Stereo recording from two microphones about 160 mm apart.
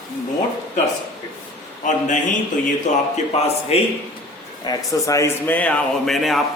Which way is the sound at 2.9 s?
45° left (ahead or behind).